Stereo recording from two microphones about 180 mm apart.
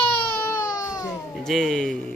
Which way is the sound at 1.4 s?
Centre (ahead or behind).